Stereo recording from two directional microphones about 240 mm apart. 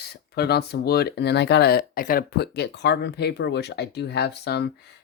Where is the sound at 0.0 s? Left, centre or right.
Left.